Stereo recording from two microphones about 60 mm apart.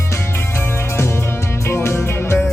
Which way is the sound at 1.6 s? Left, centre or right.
Left.